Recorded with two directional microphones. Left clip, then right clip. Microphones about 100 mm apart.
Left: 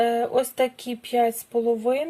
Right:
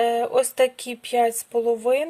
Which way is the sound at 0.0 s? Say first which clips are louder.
Right 1 dB; 55° right (ahead or behind).